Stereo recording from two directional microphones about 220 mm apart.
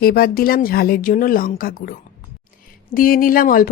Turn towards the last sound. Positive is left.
turn(degrees=40)  # may be behind; listen again after turning